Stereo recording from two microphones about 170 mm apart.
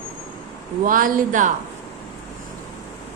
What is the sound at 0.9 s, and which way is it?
Speech, 55° right (ahead or behind).